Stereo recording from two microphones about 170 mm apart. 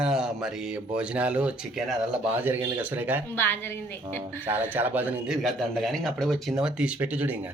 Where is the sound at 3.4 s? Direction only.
15° left (ahead or behind).